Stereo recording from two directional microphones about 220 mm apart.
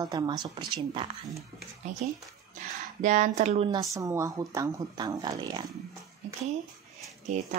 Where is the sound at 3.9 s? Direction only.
15° right (ahead or behind).